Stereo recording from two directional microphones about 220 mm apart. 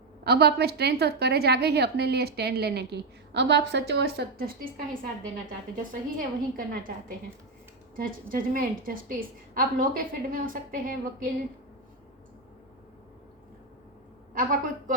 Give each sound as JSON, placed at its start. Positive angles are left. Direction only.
{"t": 0.3, "sound": "a woman's voice", "side_deg": -45}
{"t": 7.9, "sound": "a woman's voice", "side_deg": -40}
{"t": 14.3, "sound": "a woman's voice", "side_deg": -40}